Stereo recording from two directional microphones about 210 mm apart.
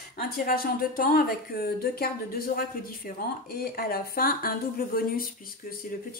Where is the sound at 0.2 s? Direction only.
45° left (ahead or behind).